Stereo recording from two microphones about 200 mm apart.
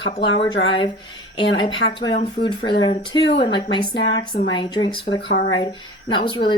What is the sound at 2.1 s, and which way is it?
Speech, 50° left (ahead or behind).